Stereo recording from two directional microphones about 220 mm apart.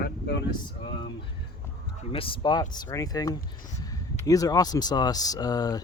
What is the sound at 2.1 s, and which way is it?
Speech, 25° left (ahead or behind).